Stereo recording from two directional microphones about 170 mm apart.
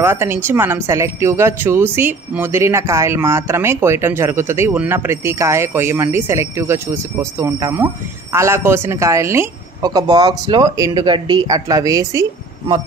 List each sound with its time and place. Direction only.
0.0 s speech: 15° right (ahead or behind)